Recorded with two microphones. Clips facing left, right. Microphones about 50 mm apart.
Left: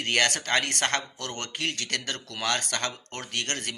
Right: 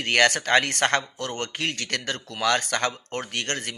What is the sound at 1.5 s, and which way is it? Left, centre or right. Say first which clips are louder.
A man's voice: right 2 dB; right.